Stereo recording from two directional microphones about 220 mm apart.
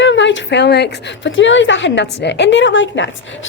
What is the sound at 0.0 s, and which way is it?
A woman's voice, 55° left (ahead or behind).